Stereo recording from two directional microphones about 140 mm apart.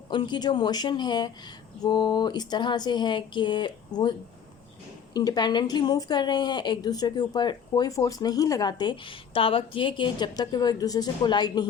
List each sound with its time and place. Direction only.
0.1 s speech: 35° left (ahead or behind)
5.1 s speech: 30° left (ahead or behind)